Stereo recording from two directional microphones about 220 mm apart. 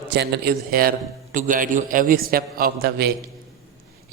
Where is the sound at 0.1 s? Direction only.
50° right (ahead or behind).